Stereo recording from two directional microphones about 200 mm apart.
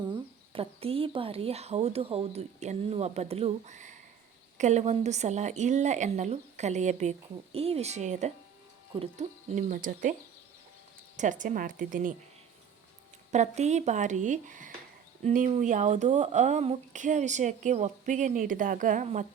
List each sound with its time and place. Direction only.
0.5 s speech: 30° right (ahead or behind)
11.2 s a woman's voice: 40° right (ahead or behind)
13.3 s speech: 35° right (ahead or behind)